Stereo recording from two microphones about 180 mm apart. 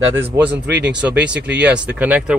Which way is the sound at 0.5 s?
75° right (ahead or behind).